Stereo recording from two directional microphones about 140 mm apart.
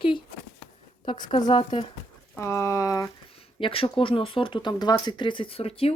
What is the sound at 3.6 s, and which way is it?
Speech, 40° left (ahead or behind).